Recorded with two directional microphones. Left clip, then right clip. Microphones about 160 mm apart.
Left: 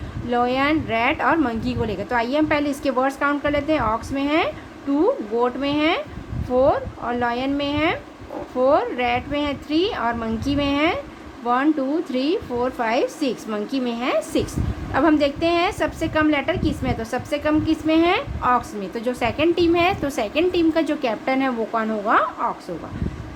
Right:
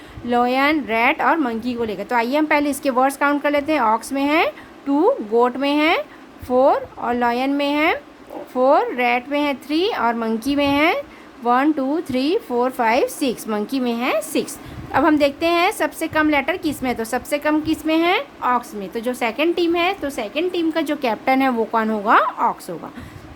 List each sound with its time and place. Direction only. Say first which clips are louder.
0.3 s a woman's voice: right 3 dB; 35° right (ahead or behind); by 20.8 s 10° right (ahead or behind)
20.8 s a woman's voice: right 3 dB; 30° right (ahead or behind)